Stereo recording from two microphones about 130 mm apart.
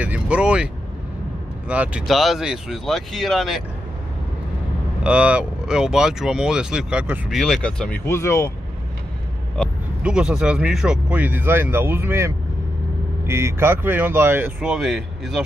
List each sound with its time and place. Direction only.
0.0 s speech: 10° right (ahead or behind)
1.7 s speech: 10° right (ahead or behind)
5.0 s speech: 10° right (ahead or behind)
7.3 s speech: 5° left (ahead or behind); by 8.5 s 20° left (ahead or behind)
9.6 s vehicle: 10° left (ahead or behind)
10.0 s speech: 5° right (ahead or behind)
13.3 s speech: 20° right (ahead or behind)
14.6 s speech: 5° right (ahead or behind)